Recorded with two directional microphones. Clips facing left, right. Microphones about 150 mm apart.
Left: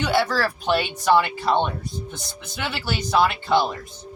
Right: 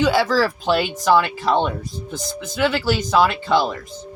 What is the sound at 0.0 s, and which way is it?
Speech, 90° right.